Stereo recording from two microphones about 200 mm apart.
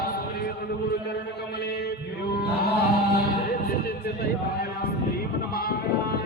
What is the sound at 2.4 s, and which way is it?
Music, 50° left (ahead or behind).